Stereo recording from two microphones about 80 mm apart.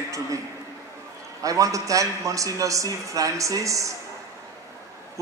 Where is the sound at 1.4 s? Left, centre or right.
Right.